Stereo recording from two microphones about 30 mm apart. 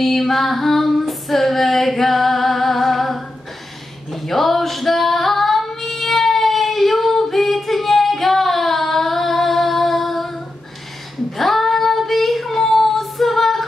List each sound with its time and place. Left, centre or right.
0.0 s female singing: centre
11.3 s child singing: centre